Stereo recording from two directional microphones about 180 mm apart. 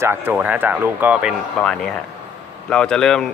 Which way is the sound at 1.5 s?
5° left (ahead or behind).